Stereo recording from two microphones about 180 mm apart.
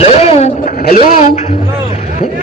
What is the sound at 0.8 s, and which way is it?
Speech, 55° left (ahead or behind).